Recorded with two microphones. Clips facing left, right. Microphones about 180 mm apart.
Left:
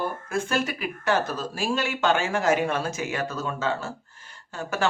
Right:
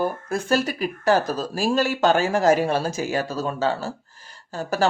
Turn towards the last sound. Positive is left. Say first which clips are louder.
# right 4 dB
turn(degrees=-35)  # may be behind; listen again after turning